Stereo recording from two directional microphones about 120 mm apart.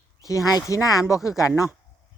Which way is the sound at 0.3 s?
25° left (ahead or behind).